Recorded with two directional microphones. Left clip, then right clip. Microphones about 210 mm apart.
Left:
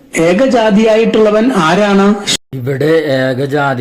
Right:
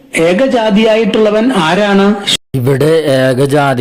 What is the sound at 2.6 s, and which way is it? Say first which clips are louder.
Speech: right 2 dB; 50° right (ahead or behind).